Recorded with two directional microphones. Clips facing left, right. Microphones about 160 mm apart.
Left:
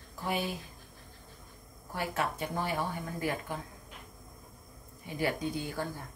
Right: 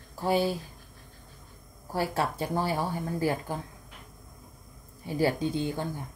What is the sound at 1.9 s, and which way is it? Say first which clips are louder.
Speech: right 5 dB; 35° right (ahead or behind).